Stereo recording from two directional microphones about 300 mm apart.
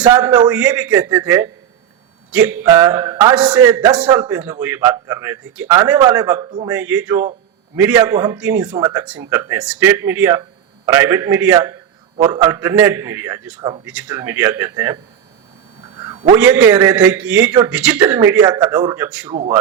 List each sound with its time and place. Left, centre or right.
0.0 s a man's voice: centre
6.7 s a man's voice: centre
16.0 s a sound: centre
16.4 s a man's voice: centre
19.3 s a man's voice: centre